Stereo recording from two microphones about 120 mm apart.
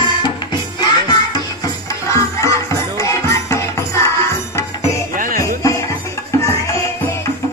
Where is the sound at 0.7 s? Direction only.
35° left (ahead or behind).